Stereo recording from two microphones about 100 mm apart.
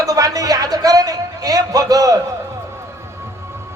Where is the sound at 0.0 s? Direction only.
35° right (ahead or behind).